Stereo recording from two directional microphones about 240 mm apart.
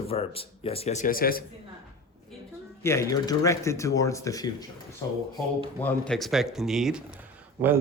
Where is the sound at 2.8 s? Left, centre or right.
Centre.